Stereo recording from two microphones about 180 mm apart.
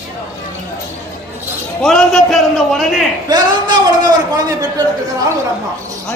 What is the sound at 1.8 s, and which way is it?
A man's voice, centre (ahead or behind).